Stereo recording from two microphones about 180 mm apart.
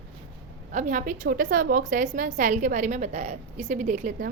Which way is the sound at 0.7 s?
45° right (ahead or behind).